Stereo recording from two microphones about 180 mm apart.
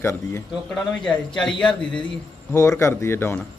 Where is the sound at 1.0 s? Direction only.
5° left (ahead or behind).